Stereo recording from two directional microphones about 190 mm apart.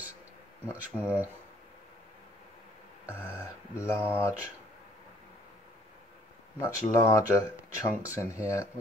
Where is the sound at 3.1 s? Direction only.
10° right (ahead or behind).